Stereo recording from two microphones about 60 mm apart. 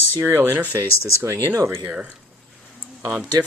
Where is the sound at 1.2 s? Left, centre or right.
Right.